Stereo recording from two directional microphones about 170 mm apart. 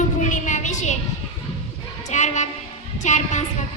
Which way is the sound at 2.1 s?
45° left (ahead or behind).